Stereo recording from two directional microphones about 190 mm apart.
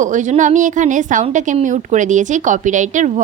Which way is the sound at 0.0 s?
40° right (ahead or behind).